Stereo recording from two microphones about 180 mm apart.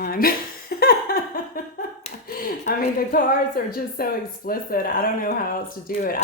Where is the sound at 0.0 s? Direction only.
55° left (ahead or behind).